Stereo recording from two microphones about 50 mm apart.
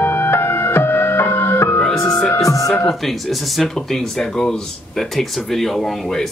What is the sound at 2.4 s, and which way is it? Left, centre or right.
Music, left.